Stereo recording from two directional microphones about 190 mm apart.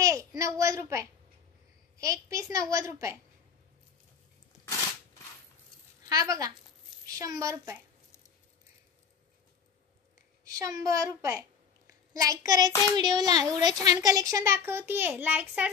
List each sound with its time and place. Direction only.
0.0 s a sound: 15° right (ahead or behind)
0.6 s speech: 15° right (ahead or behind)
6.0 s speech: 20° right (ahead or behind)
10.4 s a child's voice: 15° right (ahead or behind)